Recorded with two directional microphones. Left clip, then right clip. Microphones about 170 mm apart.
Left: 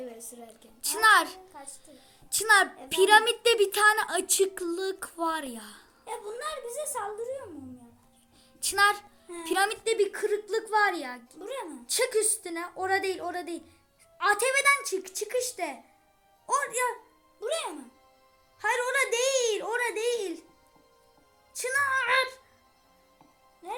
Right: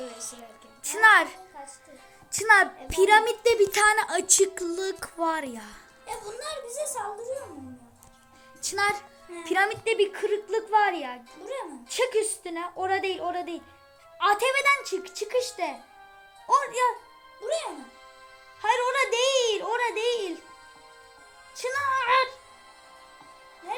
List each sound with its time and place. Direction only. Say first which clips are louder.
0.9 s a woman's voice: right 3 dB; 5° right (ahead or behind)
2.9 s a woman's voice: right 1 dB; 5° right (ahead or behind)
6.1 s speech: right 1 dB; 15° left (ahead or behind)
6.4 s a woman's voice: right 3 dB; 40° left (ahead or behind)
8.6 s a woman's voice: left 2 dB; 10° right (ahead or behind)
17.4 s speech: right 2 dB; 15° left (ahead or behind)
18.6 s a woman's voice: right 3 dB; centre (ahead or behind)
21.5 s a woman's voice: even; centre (ahead or behind)